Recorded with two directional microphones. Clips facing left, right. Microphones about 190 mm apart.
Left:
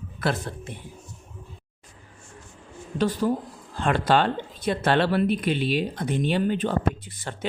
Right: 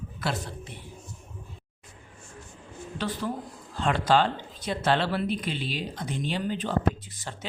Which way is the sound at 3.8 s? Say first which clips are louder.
Left 2 dB; 55° left (ahead or behind).